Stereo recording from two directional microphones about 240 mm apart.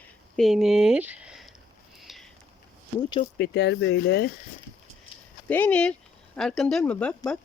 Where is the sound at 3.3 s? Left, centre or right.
Left.